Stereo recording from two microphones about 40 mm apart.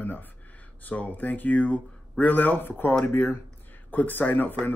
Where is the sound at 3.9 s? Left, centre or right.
Left.